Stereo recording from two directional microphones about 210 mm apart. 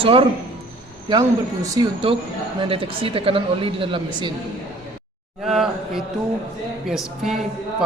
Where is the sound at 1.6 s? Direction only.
20° right (ahead or behind).